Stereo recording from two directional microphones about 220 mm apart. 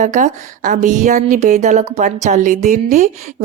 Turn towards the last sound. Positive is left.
turn(degrees=-35)  # may be behind; listen again after turning